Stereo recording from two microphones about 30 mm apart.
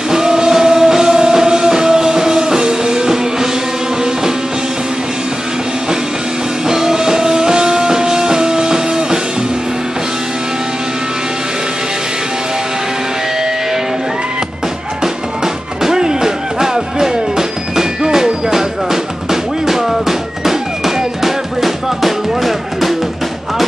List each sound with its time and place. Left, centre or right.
0.1 s music: right
6.7 s music: centre
15.4 s music: centre